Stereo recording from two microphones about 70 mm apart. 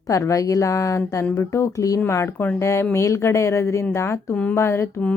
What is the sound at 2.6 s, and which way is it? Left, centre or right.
A woman's voice, left.